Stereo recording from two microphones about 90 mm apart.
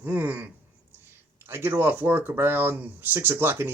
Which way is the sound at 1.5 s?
25° right (ahead or behind).